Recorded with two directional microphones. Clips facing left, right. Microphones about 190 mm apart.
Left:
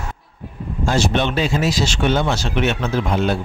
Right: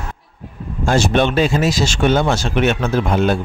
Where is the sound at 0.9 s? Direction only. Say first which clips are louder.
Right 4 dB; 50° right (ahead or behind).